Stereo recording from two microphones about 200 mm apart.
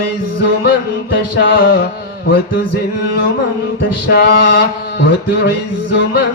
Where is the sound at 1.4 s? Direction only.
50° left (ahead or behind).